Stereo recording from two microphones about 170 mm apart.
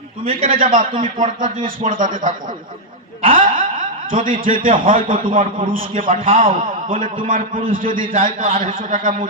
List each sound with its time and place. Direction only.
0.4 s a man's voice: 55° right (ahead or behind)
3.3 s a man's voice: 55° right (ahead or behind)